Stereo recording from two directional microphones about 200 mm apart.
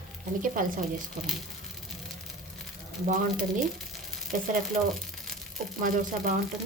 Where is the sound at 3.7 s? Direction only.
Centre (ahead or behind).